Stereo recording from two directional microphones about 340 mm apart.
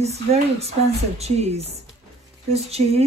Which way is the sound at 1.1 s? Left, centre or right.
Centre.